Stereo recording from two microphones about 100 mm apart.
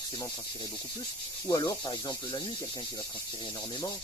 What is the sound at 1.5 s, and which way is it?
Speech, 45° left (ahead or behind).